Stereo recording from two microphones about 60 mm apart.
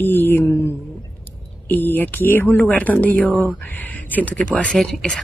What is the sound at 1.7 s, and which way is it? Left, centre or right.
Speech, left.